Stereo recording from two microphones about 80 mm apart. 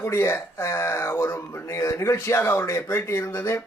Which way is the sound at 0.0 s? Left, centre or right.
Left.